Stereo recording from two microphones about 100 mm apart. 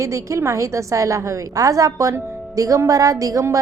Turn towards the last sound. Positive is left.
turn(degrees=-35)  # may be behind; listen again after turning